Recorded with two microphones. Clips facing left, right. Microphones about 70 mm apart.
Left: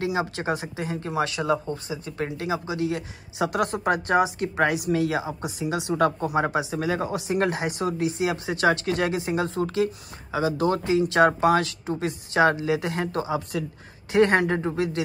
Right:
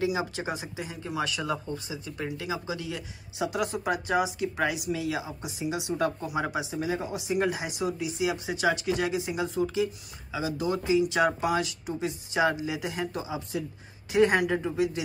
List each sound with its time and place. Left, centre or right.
0.0 s speech: left
6.2 s speech: left
6.7 s speech: left
14.1 s speech: left